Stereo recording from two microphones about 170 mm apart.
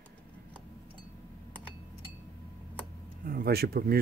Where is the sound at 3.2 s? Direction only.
60° right (ahead or behind).